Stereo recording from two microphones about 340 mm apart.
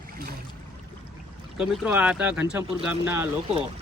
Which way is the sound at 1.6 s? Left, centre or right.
Centre.